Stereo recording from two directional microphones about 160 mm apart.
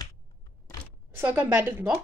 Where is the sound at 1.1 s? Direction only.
15° right (ahead or behind).